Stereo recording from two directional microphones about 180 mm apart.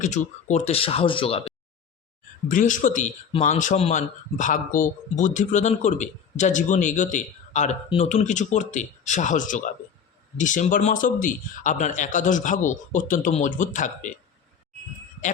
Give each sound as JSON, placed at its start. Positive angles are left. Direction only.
{"t": 0.0, "sound": "speech", "side_deg": 40}
{"t": 2.5, "sound": "speech", "side_deg": 45}